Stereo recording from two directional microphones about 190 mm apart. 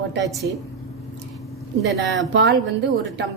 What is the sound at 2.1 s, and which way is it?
Speech, 80° right.